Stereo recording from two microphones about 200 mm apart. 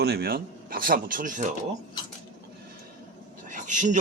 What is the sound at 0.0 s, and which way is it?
Speech, 50° right (ahead or behind).